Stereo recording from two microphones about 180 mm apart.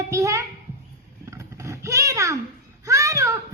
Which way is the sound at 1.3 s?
15° right (ahead or behind).